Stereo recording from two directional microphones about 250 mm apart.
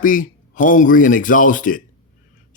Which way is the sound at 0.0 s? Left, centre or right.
Left.